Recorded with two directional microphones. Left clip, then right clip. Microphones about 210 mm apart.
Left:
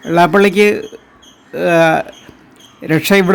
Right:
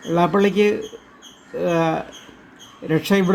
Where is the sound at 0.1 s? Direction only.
35° left (ahead or behind).